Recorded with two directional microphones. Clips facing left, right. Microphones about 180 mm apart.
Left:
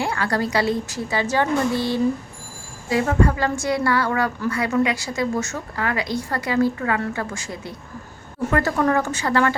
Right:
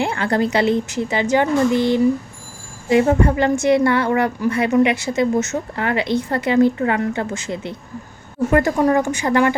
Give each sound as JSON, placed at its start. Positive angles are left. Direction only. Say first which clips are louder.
{"t": 0.0, "sound": "a woman's voice", "louder": "right 4 dB", "side_deg": -25}